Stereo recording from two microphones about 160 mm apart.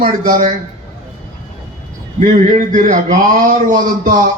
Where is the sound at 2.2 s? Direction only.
55° right (ahead or behind).